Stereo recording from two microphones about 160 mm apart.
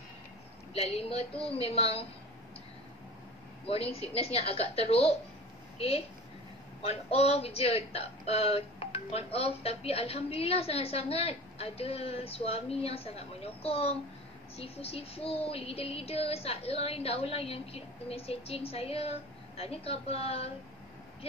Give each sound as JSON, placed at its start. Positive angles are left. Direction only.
{"t": 0.7, "sound": "speech", "side_deg": 40}
{"t": 3.6, "sound": "a woman's voice", "side_deg": 40}